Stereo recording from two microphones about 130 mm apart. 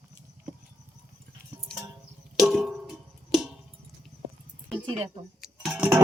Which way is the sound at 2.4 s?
Centre (ahead or behind).